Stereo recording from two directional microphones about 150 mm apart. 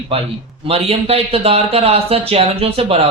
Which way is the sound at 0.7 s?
40° right (ahead or behind).